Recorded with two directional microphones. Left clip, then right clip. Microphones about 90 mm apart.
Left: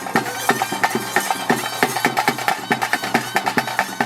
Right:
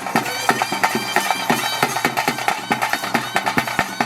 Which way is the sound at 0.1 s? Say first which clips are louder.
Even; 20° right (ahead or behind).